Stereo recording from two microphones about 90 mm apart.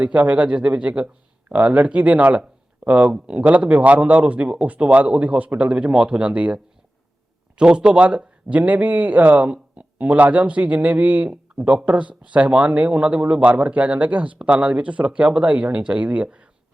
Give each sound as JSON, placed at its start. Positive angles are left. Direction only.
{"t": 0.0, "sound": "a man's voice", "side_deg": -15}